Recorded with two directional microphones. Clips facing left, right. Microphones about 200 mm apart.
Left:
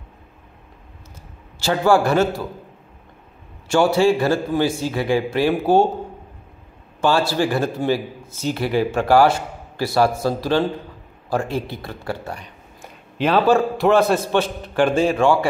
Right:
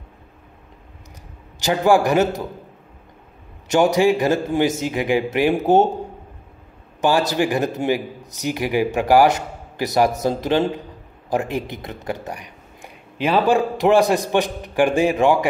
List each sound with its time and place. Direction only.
1.6 s speech: 15° right (ahead or behind)
3.6 s a man's voice: 20° right (ahead or behind)
7.0 s speech: 15° right (ahead or behind)